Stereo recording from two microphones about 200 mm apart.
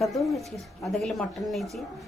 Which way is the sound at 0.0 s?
Centre (ahead or behind).